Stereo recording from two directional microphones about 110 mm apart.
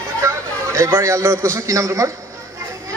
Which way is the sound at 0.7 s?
25° right (ahead or behind).